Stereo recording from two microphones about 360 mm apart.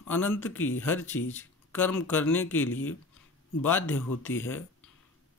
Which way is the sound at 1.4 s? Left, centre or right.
Centre.